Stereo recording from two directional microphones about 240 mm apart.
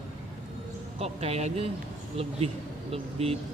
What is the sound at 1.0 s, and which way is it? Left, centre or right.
Speech, right.